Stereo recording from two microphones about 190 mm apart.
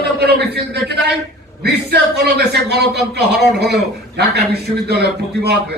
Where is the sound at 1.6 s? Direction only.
60° right (ahead or behind).